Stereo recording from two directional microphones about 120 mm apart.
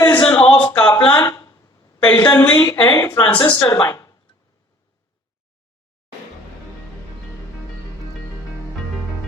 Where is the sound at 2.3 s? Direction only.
20° left (ahead or behind).